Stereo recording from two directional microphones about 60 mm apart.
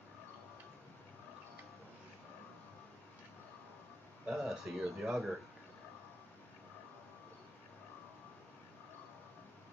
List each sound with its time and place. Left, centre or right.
4.3 s speech: centre